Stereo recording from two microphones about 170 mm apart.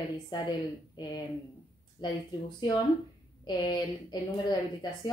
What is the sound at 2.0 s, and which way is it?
Speech, 25° left (ahead or behind).